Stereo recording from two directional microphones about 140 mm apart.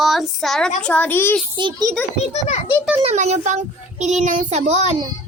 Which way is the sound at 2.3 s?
50° left (ahead or behind).